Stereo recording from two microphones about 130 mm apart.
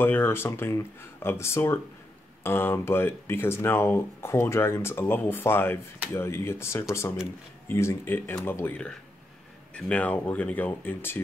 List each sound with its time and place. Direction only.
0.0 s speech: 15° left (ahead or behind)